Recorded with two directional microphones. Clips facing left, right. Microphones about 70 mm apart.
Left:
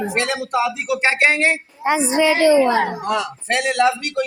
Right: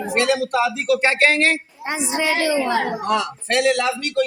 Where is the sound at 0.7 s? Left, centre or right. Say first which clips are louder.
Right 1 dB; centre.